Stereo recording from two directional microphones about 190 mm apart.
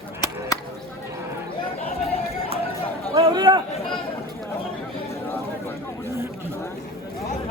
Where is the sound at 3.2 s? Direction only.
25° right (ahead or behind).